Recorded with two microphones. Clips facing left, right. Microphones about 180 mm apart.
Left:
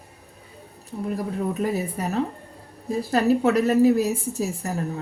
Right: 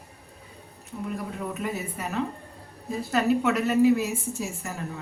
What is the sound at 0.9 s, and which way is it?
A woman's voice, 35° left (ahead or behind).